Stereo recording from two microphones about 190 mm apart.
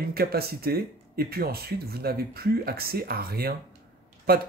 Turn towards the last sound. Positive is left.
turn(degrees=-55)  # may be behind; listen again after turning